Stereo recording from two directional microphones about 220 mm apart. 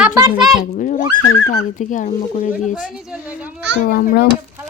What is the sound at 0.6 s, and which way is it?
A woman's voice, 35° left (ahead or behind).